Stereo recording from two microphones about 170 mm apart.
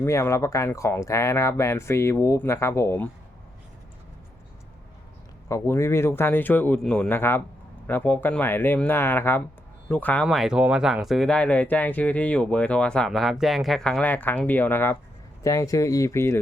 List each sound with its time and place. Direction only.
0.0 s speech: 15° left (ahead or behind)
5.5 s speech: 15° left (ahead or behind)
10.2 s speech: 5° right (ahead or behind); by 16.4 s 15° left (ahead or behind)